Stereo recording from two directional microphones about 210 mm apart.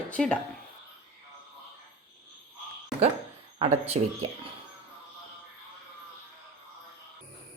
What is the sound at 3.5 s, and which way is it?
Speech, 30° right (ahead or behind).